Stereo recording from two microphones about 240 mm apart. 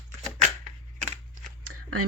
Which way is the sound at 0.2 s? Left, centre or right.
Right.